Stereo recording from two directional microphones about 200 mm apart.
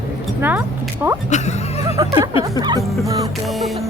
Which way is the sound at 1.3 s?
35° left (ahead or behind).